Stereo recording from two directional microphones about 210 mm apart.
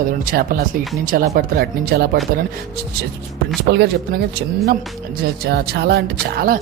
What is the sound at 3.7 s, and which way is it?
Music, 50° right (ahead or behind).